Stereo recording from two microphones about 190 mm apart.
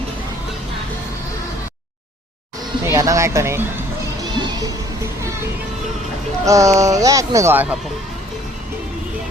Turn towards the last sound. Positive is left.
turn(degrees=-10)  # may be behind; listen again after turning